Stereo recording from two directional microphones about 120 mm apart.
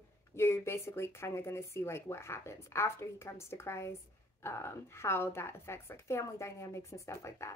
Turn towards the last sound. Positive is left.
turn(degrees=25)  # may be behind; listen again after turning